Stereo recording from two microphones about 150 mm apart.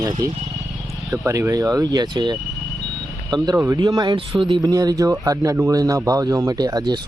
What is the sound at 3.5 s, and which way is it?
Speech, 15° right (ahead or behind).